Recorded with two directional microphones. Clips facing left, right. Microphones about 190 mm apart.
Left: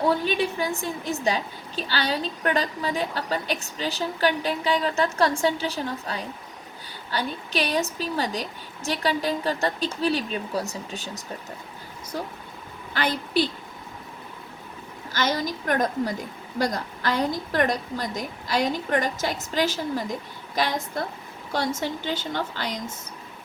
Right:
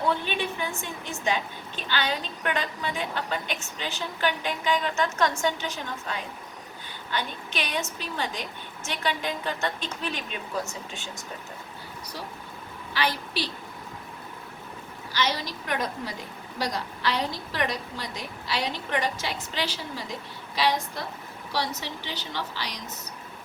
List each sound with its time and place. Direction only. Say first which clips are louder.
0.0 s a woman's voice: left 5 dB; 40° left (ahead or behind)
12.9 s a woman's voice: left 3 dB; 50° left (ahead or behind)
15.1 s a woman's voice: left 3 dB; 45° left (ahead or behind)